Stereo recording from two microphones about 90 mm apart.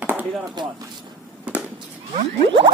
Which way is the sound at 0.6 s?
55° right (ahead or behind).